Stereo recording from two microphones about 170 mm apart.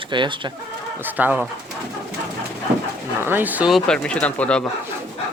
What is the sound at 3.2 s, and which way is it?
Speech, 10° right (ahead or behind).